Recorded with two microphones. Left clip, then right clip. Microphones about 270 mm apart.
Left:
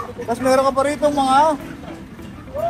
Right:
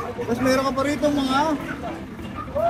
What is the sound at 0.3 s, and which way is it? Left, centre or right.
Speech, centre.